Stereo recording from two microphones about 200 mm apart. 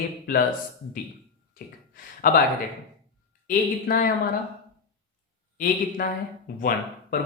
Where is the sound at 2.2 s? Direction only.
45° left (ahead or behind).